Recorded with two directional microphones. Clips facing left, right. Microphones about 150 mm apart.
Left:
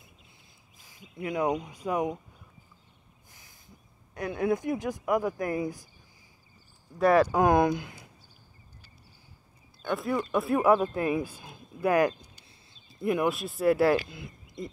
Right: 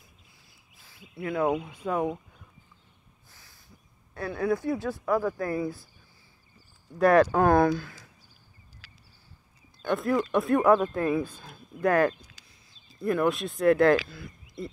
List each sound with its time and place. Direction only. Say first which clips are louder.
0.7 s a sound: even; 15° left (ahead or behind)
1.2 s speech: right 2 dB; 15° left (ahead or behind)
3.3 s speech: left 1 dB; 20° left (ahead or behind)
7.0 s speech: right 2 dB; centre (ahead or behind)
7.3 s speech: right 1 dB; 15° left (ahead or behind)
9.8 s speech: right 3 dB; centre (ahead or behind)
13.3 s speech: right 2 dB; 5° left (ahead or behind)
14.0 s speech: even; 20° left (ahead or behind)